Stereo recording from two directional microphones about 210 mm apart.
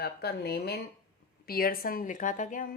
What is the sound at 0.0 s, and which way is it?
A woman's voice, 50° left (ahead or behind).